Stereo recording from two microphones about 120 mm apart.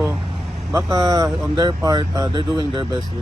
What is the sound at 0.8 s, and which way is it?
Speech, 35° right (ahead or behind).